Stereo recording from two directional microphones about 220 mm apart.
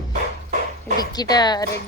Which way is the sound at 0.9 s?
20° left (ahead or behind).